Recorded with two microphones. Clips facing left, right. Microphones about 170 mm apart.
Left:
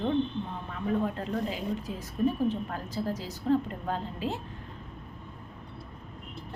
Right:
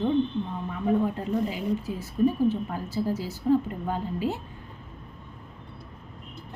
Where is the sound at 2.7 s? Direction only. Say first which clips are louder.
Right 4 dB; 10° right (ahead or behind).